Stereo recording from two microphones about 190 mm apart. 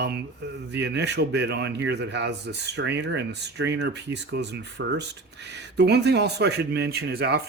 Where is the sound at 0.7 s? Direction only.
65° right (ahead or behind).